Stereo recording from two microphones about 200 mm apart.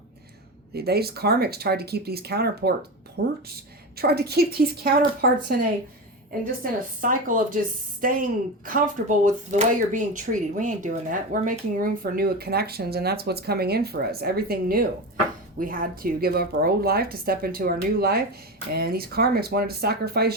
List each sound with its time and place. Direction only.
0.7 s a woman's voice: 55° right (ahead or behind)
6.6 s speech: 40° right (ahead or behind)